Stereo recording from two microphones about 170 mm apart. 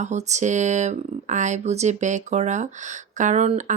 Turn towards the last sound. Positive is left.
turn(degrees=-45)  # may be behind; listen again after turning